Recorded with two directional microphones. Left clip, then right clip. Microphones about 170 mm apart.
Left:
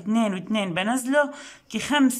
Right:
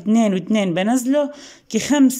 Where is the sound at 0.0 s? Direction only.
25° right (ahead or behind).